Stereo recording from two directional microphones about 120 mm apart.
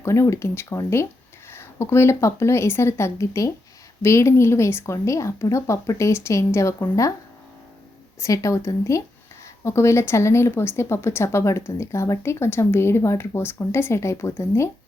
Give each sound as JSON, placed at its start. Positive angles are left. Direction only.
{"t": 0.0, "sound": "speech", "side_deg": 20}
{"t": 8.2, "sound": "speech", "side_deg": 25}